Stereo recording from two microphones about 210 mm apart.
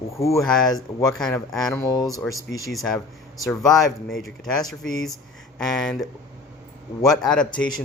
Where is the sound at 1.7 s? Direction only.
15° left (ahead or behind).